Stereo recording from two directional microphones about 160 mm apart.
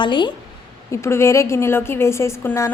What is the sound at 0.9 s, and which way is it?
A woman's voice, 15° left (ahead or behind).